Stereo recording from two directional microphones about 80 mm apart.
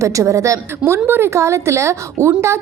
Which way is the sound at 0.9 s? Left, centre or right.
Right.